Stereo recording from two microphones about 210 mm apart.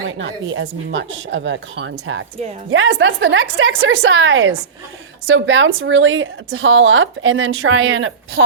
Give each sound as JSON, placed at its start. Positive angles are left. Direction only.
{"t": 0.2, "sound": "a woman's voice", "side_deg": -60}